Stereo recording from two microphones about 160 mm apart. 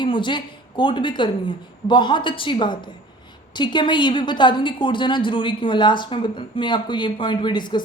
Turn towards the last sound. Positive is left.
turn(degrees=30)  # may be behind; listen again after turning